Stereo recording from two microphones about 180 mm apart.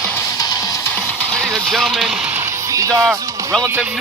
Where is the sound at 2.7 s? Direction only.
15° right (ahead or behind).